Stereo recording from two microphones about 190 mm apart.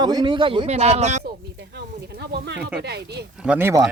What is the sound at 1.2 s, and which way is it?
Snake, 60° right (ahead or behind).